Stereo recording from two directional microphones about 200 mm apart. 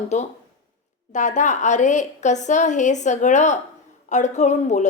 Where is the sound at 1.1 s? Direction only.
35° left (ahead or behind).